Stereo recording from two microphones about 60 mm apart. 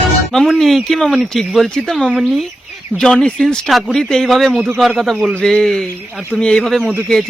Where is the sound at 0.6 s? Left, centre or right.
Centre.